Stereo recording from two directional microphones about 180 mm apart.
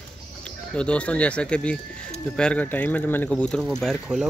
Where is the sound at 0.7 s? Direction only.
5° left (ahead or behind).